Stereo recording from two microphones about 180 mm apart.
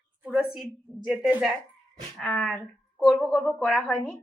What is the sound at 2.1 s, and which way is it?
A woman's voice, 5° left (ahead or behind).